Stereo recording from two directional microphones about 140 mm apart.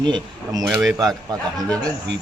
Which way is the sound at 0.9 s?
25° right (ahead or behind).